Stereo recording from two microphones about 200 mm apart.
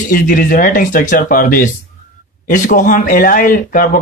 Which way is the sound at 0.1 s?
45° left (ahead or behind).